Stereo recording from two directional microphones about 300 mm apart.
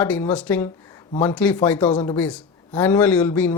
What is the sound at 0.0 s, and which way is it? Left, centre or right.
A man's voice, centre.